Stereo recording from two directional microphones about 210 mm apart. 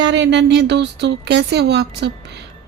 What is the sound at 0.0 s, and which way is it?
Speech, 55° right (ahead or behind).